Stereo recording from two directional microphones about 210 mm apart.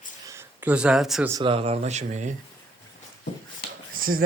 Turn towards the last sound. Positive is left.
turn(degrees=-45)  # may be behind; listen again after turning